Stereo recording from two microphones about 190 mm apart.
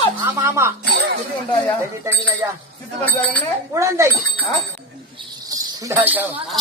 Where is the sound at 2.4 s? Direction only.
10° right (ahead or behind).